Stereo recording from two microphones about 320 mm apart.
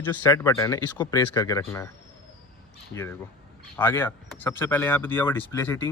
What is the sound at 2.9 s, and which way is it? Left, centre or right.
Speech, centre.